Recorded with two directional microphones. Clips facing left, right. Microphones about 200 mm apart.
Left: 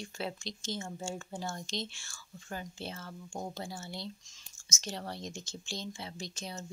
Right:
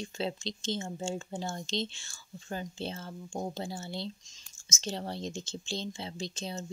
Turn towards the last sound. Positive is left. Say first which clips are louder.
# right 4 dB
turn(degrees=-25)  # may be behind; listen again after turning